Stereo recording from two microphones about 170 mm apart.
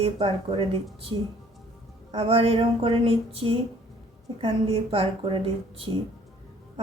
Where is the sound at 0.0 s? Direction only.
35° right (ahead or behind).